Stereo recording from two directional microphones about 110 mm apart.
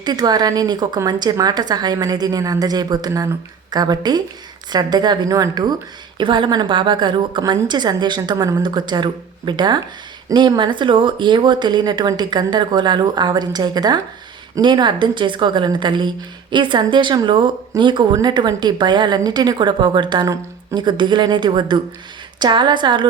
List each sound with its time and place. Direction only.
0.0 s speech: 40° right (ahead or behind)
6.1 s a woman's voice: 45° right (ahead or behind)
20.2 s speech: 30° right (ahead or behind)
20.7 s a woman's voice: 45° right (ahead or behind)